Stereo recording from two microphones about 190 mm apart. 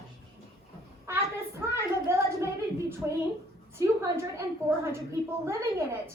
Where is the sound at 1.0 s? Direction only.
15° right (ahead or behind).